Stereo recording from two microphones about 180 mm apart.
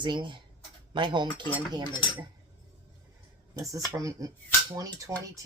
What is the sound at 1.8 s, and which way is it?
Dishes, 25° left (ahead or behind).